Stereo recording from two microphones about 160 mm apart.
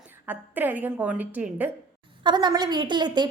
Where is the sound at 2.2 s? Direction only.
30° right (ahead or behind).